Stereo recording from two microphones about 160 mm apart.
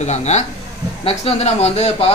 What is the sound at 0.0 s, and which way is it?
Speech, 45° left (ahead or behind).